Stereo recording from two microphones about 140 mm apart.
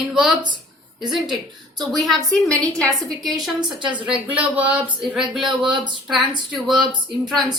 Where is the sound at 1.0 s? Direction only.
35° right (ahead or behind).